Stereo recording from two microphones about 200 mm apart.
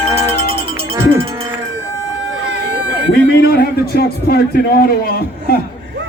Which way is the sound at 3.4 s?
50° left (ahead or behind).